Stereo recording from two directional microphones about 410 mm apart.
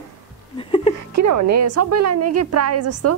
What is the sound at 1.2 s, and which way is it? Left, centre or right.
A woman's voice, right.